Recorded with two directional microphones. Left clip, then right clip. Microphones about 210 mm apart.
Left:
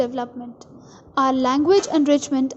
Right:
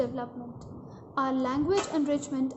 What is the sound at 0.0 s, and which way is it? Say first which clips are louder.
A woman's voice: left 8 dB; 40° left (ahead or behind).